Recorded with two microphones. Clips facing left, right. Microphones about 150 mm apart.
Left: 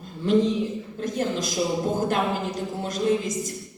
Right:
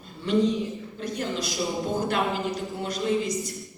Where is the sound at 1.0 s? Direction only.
45° left (ahead or behind).